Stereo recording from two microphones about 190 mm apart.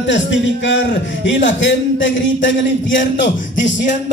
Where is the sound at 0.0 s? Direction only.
75° left (ahead or behind).